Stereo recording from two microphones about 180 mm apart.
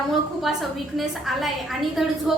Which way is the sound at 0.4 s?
Centre (ahead or behind).